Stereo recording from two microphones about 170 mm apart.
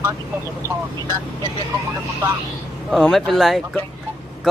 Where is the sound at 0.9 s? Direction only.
25° right (ahead or behind).